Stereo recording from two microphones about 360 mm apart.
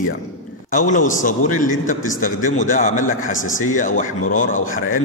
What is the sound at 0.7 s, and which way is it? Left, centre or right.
A man's voice, left.